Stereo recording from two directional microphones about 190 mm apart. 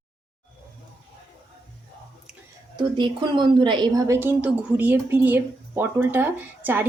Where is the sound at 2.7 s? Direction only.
25° right (ahead or behind).